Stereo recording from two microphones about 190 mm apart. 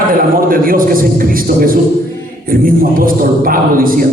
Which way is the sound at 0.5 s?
50° right (ahead or behind).